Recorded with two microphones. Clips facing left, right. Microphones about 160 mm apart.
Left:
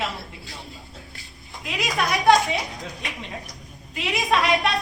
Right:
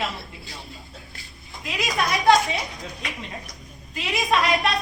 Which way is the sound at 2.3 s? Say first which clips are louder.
Left 1 dB; centre (ahead or behind).